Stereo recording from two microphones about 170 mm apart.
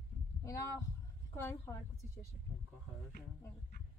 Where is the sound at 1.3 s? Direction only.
15° left (ahead or behind).